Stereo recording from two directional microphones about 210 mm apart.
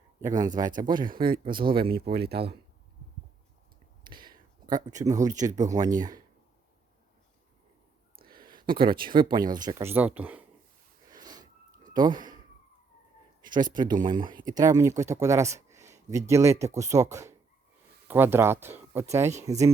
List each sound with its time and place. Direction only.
0.2 s a man's voice: 15° right (ahead or behind)
1.1 s speech: 45° right (ahead or behind)
4.1 s a sound: 20° right (ahead or behind)
5.4 s speech: 15° right (ahead or behind)
8.2 s a sound: 45° right (ahead or behind)
8.6 s a man's voice: 25° right (ahead or behind); by 10.4 s 5° right (ahead or behind)
11.1 s snort: 20° right (ahead or behind)
11.9 s speech: 20° right (ahead or behind)
13.4 s a sound: 20° right (ahead or behind)
13.7 s speech: 20° right (ahead or behind)